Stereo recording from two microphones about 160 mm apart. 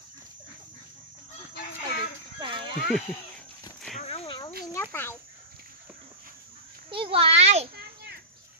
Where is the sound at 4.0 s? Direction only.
40° left (ahead or behind).